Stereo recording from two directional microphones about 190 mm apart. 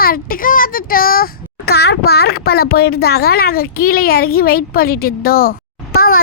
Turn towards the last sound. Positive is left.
turn(degrees=50)  # may be behind; listen again after turning